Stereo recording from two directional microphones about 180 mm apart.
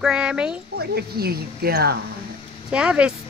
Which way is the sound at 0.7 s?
60° right (ahead or behind).